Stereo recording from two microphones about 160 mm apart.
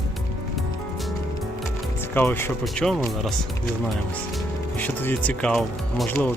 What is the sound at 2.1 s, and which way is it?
Speech, 15° left (ahead or behind).